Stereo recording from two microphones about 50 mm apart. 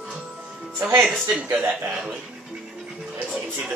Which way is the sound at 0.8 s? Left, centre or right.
Right.